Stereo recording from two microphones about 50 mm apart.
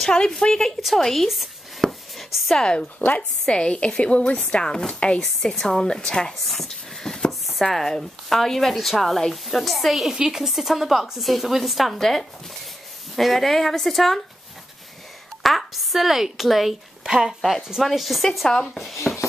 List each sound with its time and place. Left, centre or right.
0.0 s a woman's voice: centre
0.7 s speech: centre
1.0 s a sound: centre
2.5 s speech: centre
5.2 s a woman's voice: centre
6.4 s a sound: centre
7.4 s speech: centre
15.4 s a woman's voice: centre
19.1 s a sound: left